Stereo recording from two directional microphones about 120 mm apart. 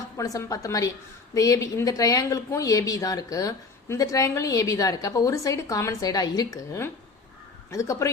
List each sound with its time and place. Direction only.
0.3 s a woman's voice: 30° left (ahead or behind)
7.7 s a woman's voice: 25° left (ahead or behind)